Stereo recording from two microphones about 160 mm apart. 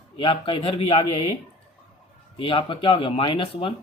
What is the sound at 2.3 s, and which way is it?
Speech, 35° left (ahead or behind).